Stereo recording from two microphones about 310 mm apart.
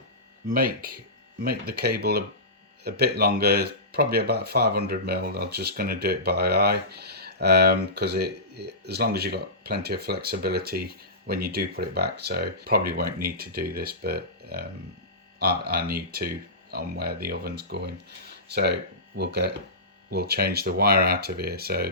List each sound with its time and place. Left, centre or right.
0.4 s speech: right